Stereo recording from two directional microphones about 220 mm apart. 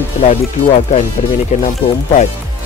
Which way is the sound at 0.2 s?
30° left (ahead or behind).